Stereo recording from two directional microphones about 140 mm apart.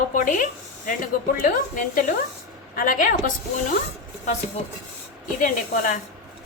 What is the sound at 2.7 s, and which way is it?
Speech, 80° left.